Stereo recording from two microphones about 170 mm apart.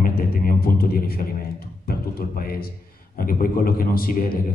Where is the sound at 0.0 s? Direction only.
60° left (ahead or behind).